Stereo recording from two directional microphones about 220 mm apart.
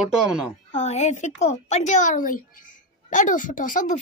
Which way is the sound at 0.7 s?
30° left (ahead or behind).